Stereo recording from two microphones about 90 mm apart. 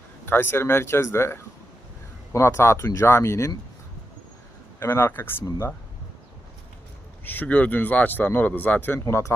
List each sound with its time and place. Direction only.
0.3 s speech: 25° left (ahead or behind)
4.8 s speech: 30° left (ahead or behind)
7.3 s speech: 20° left (ahead or behind)